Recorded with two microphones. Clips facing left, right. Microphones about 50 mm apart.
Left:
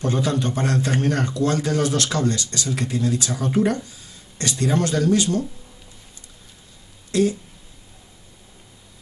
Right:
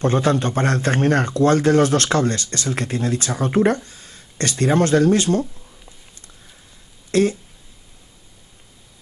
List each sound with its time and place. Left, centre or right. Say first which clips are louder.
0.0 s a man's voice: right 4 dB; right
7.1 s speech: right 2 dB; right